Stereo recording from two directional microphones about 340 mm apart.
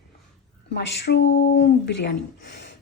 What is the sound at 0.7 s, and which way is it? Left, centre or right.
Speech, left.